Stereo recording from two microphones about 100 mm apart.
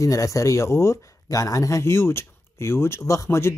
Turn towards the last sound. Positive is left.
turn(degrees=25)  # may be behind; listen again after turning